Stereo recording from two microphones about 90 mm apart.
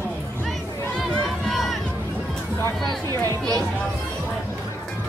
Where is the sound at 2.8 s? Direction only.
45° right (ahead or behind).